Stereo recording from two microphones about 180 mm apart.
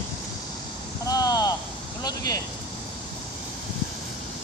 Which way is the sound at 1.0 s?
20° left (ahead or behind).